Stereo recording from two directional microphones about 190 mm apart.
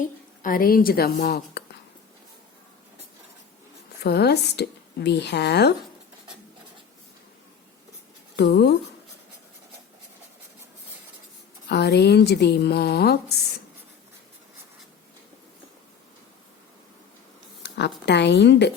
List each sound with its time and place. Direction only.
0.0 s a woman's voice: 45° left (ahead or behind)
4.0 s a woman's voice: 60° left (ahead or behind)
8.4 s a woman's voice: 60° left (ahead or behind)
11.7 s a woman's voice: 60° left (ahead or behind)
17.6 s a woman's voice: 65° left (ahead or behind)